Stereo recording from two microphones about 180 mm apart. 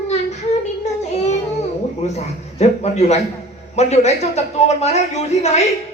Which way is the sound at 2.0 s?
40° left (ahead or behind).